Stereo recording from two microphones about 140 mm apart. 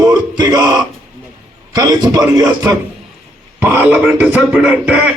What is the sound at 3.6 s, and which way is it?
Speech, 10° right (ahead or behind).